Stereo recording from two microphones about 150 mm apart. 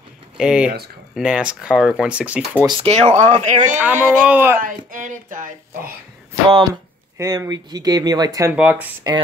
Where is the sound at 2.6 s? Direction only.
30° right (ahead or behind).